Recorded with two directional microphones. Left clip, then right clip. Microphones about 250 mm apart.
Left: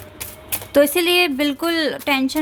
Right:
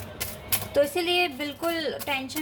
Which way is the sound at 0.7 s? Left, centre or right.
Left.